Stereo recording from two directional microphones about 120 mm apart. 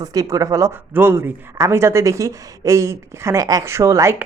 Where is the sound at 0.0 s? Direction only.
30° right (ahead or behind).